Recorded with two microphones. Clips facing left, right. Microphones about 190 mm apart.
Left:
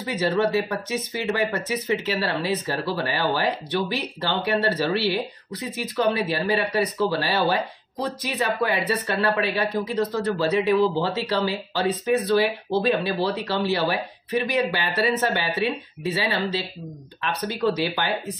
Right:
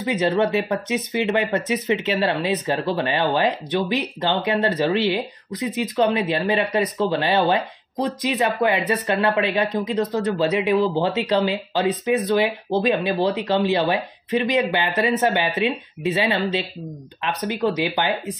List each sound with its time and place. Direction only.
0.0 s speech: 20° right (ahead or behind)